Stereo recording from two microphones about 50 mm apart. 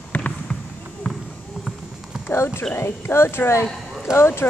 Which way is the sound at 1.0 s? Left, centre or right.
Centre.